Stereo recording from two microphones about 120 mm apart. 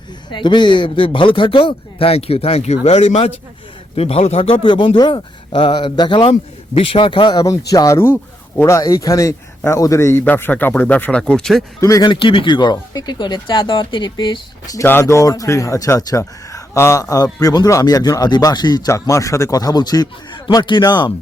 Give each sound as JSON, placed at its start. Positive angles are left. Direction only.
{"t": 0.3, "sound": "a man's voice", "side_deg": 40}
{"t": 4.6, "sound": "speech", "side_deg": 40}
{"t": 11.8, "sound": "speech", "side_deg": 25}
{"t": 12.0, "sound": "speech", "side_deg": 45}
{"t": 14.8, "sound": "speech", "side_deg": 20}